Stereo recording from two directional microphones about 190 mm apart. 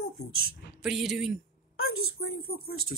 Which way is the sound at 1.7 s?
90° left.